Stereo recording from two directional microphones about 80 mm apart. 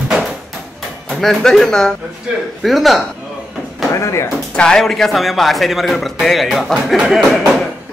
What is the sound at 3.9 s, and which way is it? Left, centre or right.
Speech, left.